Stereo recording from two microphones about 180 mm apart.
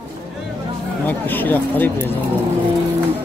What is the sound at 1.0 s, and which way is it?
Speech, 10° left (ahead or behind).